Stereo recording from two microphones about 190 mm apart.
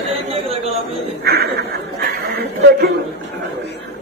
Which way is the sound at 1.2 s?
55° right (ahead or behind).